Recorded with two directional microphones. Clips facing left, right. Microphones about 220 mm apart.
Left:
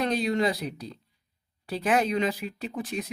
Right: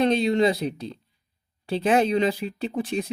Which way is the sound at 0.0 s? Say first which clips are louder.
Right 5 dB; 25° right (ahead or behind).